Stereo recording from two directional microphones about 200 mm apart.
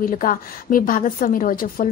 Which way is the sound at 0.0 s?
45° left (ahead or behind).